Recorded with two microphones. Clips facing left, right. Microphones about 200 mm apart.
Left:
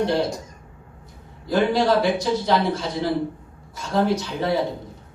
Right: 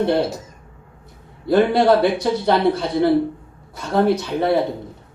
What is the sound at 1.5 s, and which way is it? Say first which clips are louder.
A man's voice: right 5 dB; 60° right (ahead or behind).